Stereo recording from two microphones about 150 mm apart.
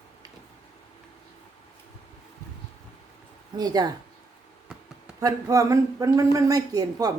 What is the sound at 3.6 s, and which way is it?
Speech, 25° right (ahead or behind).